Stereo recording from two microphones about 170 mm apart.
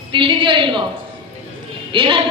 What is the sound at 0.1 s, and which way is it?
Speech, 30° right (ahead or behind).